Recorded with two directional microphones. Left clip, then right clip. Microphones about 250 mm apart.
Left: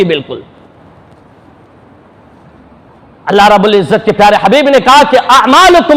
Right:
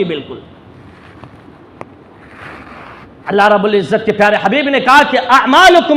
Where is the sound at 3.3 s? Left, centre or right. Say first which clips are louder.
Left 5 dB; left.